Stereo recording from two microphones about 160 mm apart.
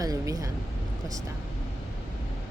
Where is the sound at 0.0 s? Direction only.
20° right (ahead or behind).